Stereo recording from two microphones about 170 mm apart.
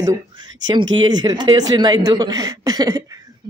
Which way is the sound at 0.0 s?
20° right (ahead or behind).